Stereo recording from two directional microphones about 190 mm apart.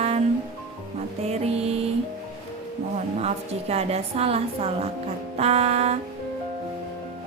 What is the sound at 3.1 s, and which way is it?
A woman's voice, 35° right (ahead or behind).